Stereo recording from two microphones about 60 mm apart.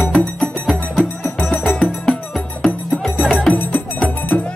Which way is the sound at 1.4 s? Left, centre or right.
Left.